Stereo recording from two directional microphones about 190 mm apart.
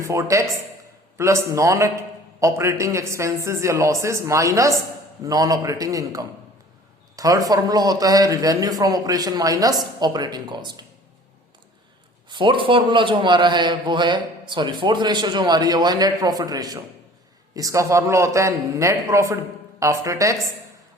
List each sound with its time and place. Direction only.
0.0 s a man's voice: 15° right (ahead or behind)
12.3 s a man's voice: 25° right (ahead or behind)